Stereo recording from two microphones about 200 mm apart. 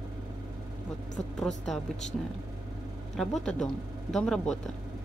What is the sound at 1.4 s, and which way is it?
Speech, centre (ahead or behind).